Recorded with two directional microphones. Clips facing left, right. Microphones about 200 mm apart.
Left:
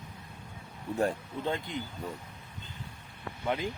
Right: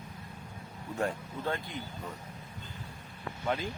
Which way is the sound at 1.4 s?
20° left (ahead or behind).